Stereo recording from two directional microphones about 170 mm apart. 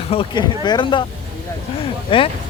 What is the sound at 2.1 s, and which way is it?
Speech, 30° left (ahead or behind).